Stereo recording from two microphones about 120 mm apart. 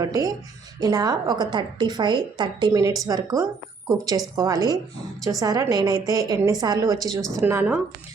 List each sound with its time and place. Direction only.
0.0 s a woman's voice: 30° right (ahead or behind)
7.4 s speech: 15° right (ahead or behind)